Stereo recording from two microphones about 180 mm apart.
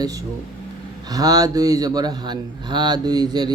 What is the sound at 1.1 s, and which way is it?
A man's voice, 20° right (ahead or behind).